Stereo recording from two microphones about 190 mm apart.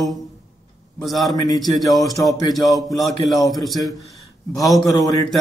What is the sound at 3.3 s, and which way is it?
Speech, 20° left (ahead or behind).